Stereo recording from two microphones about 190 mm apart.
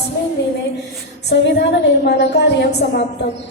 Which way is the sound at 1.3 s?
60° left (ahead or behind).